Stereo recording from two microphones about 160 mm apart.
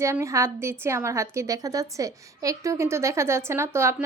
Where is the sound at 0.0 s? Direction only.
20° right (ahead or behind).